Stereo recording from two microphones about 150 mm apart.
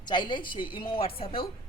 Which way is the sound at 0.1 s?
30° left (ahead or behind).